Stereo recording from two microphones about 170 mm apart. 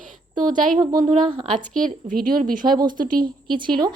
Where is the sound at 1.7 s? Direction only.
50° right (ahead or behind).